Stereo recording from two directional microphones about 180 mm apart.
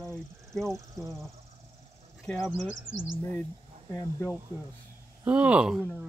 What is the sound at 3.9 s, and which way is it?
Speech, 20° left (ahead or behind).